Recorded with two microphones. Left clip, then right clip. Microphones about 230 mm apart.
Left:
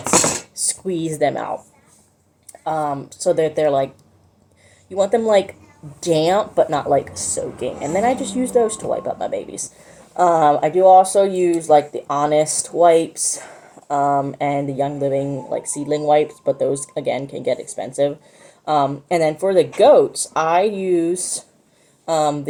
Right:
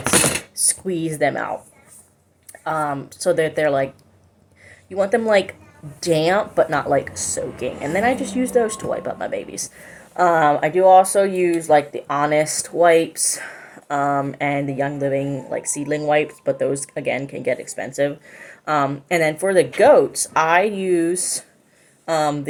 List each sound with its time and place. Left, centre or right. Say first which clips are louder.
0.5 s speech: even; centre
4.9 s speech: left 1 dB; centre